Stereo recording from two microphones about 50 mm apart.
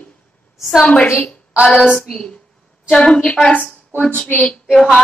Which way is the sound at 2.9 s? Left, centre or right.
Centre.